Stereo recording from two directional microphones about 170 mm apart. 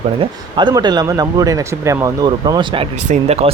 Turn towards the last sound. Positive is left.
turn(degrees=-35)  # may be behind; listen again after turning